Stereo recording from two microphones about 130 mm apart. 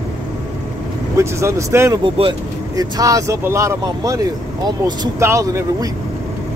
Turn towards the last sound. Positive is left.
turn(degrees=-20)  # may be behind; listen again after turning